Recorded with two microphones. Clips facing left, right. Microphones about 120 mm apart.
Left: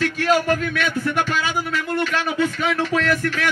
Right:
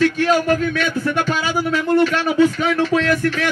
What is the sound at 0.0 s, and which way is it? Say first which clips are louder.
Speech: right 3 dB; 30° right (ahead or behind).